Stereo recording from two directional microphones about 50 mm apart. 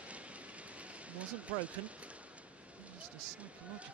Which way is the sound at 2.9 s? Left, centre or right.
Right.